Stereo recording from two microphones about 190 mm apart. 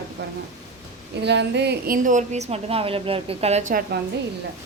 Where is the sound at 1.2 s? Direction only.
65° right (ahead or behind); by 4.0 s 45° right (ahead or behind).